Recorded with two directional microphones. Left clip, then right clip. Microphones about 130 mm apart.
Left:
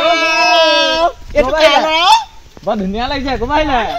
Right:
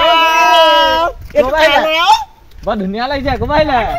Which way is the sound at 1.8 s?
90° right.